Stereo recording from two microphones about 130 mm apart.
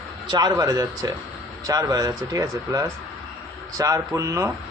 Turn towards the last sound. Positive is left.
turn(degrees=-25)  # may be behind; listen again after turning